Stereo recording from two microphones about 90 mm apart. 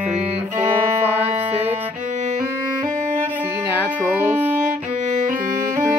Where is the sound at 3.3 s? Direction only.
25° right (ahead or behind).